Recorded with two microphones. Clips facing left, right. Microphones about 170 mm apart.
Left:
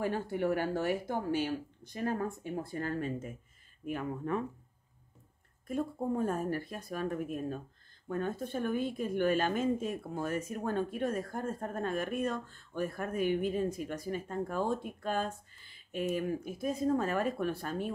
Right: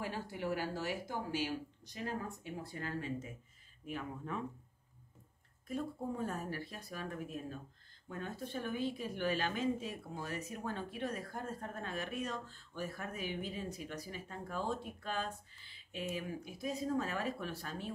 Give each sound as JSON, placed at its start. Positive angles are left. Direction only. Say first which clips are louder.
{"t": 0.0, "sound": "speech", "louder": "left 8 dB", "side_deg": 50}
{"t": 5.7, "sound": "speech", "louder": "left 6 dB", "side_deg": 50}